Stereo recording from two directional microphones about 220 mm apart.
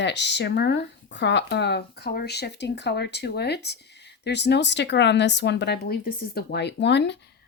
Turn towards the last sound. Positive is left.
turn(degrees=50)  # may be behind; listen again after turning